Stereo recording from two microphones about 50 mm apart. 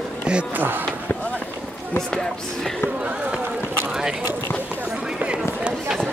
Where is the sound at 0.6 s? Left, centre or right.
Right.